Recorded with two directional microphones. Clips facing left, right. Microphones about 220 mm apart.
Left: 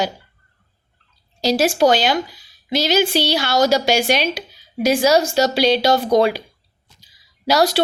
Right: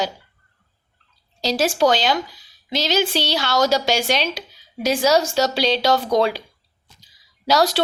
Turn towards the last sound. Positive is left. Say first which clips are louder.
# left 2 dB
turn(degrees=10)  # may be behind; listen again after turning